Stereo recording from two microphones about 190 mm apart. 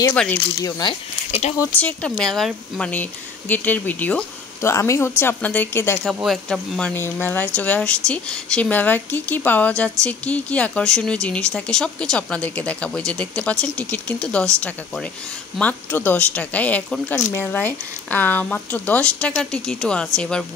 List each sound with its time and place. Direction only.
0.1 s speech: 10° left (ahead or behind); by 1.5 s 25° left (ahead or behind)
1.6 s speech: 5° left (ahead or behind)
6.2 s speech: centre (ahead or behind)
6.9 s speech: 10° left (ahead or behind)